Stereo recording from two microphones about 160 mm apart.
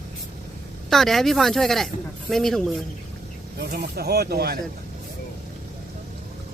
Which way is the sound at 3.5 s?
85° right.